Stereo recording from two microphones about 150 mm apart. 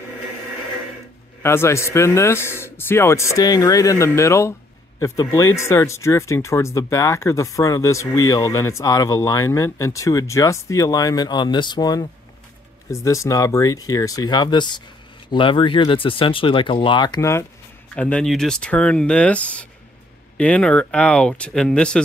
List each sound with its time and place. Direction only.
1.4 s speech: 15° left (ahead or behind)
17.2 s speech: 20° left (ahead or behind)
17.9 s speech: 5° left (ahead or behind)